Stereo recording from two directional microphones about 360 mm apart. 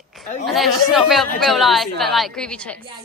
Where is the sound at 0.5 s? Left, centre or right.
Centre.